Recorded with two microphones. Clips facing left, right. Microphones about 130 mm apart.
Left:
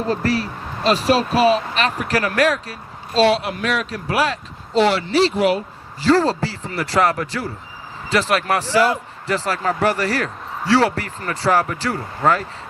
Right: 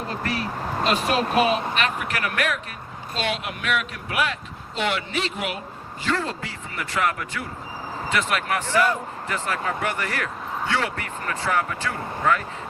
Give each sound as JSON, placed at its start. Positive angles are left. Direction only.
{"t": 0.1, "sound": "speech", "side_deg": 35}